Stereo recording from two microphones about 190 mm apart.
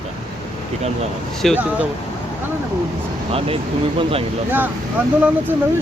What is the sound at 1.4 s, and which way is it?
Speech, centre (ahead or behind).